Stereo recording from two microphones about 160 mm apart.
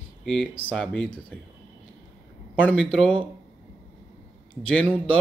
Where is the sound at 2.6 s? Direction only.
5° left (ahead or behind).